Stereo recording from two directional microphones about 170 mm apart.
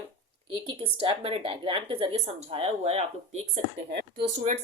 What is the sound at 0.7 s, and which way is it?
A woman's voice, 30° right (ahead or behind).